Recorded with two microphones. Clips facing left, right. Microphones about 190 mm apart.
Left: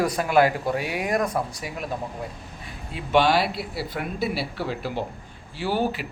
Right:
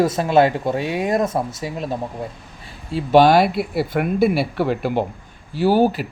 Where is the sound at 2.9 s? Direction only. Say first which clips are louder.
Right 7 dB; 40° right (ahead or behind); by 5.0 s 60° right (ahead or behind).